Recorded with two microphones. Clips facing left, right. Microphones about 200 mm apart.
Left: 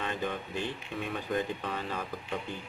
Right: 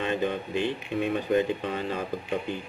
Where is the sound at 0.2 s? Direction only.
20° right (ahead or behind).